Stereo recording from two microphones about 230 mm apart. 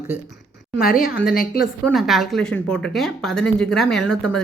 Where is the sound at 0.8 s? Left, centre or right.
Left.